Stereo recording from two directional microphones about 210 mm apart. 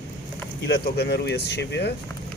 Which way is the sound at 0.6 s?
50° left (ahead or behind).